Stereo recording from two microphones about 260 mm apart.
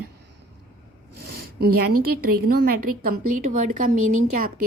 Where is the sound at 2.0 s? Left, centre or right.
Right.